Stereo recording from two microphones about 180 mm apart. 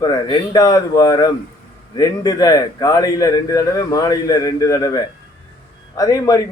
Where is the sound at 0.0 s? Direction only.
20° left (ahead or behind).